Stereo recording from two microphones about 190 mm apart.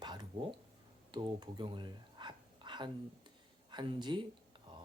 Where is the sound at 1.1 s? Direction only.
25° right (ahead or behind).